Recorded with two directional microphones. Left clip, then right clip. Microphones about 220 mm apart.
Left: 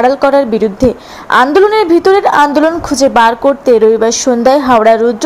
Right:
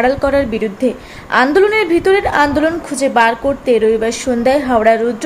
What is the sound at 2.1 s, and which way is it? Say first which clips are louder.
A woman's voice: left 5 dB; 15° left (ahead or behind).